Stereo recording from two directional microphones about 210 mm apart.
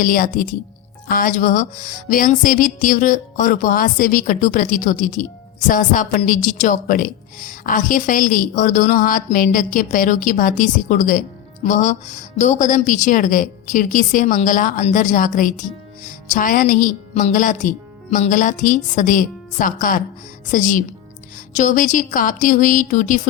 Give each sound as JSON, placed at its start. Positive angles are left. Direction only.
{"t": 0.0, "sound": "speech", "side_deg": 40}